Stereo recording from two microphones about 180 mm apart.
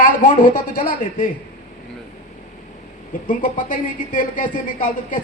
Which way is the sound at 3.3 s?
45° left (ahead or behind).